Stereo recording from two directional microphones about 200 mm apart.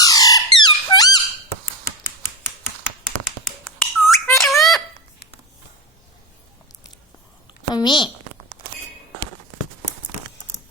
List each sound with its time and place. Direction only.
0.0 s squawk: 20° left (ahead or behind)
3.6 s squawk: centre (ahead or behind)
4.4 s squeak: centre (ahead or behind)
7.7 s a child's voice: 20° left (ahead or behind)